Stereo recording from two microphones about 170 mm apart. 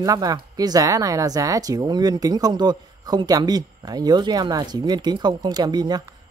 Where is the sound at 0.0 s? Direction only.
20° right (ahead or behind).